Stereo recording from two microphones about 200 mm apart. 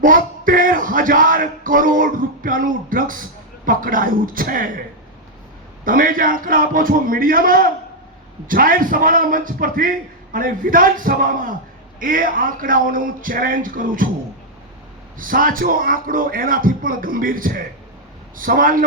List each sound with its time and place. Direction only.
0.0 s speech: 45° right (ahead or behind)
5.8 s speech: 45° right (ahead or behind)
15.2 s speech: 45° right (ahead or behind)